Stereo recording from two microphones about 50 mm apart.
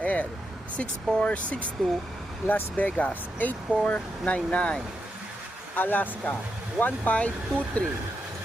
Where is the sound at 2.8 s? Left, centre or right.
Left.